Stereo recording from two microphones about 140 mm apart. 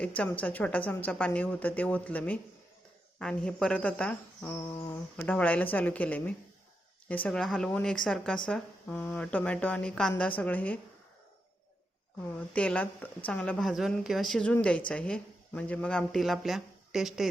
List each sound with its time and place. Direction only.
0.2 s a woman's voice: 10° left (ahead or behind)
12.5 s a woman's voice: 10° left (ahead or behind)